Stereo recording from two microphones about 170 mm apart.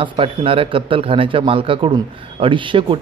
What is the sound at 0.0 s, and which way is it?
Speech, 30° right (ahead or behind).